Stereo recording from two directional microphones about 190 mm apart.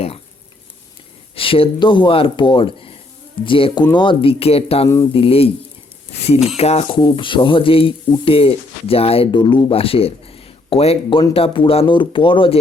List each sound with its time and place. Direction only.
1.4 s speech: 30° left (ahead or behind)